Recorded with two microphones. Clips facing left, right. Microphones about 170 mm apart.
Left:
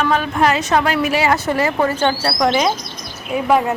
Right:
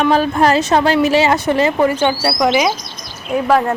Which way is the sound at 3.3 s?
5° left (ahead or behind).